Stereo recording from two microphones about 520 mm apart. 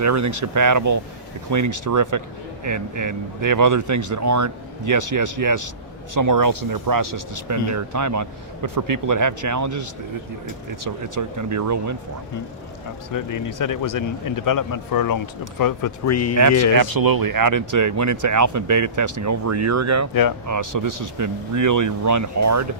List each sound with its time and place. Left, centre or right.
0.0 s speech: right
10.8 s speech: right
13.1 s a man's voice: left
16.3 s speech: right